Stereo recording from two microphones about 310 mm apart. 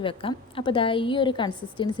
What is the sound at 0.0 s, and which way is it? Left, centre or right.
A woman's voice, centre.